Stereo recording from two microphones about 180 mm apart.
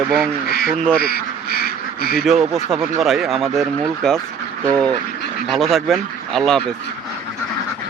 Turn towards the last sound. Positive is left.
turn(degrees=5)  # may be behind; listen again after turning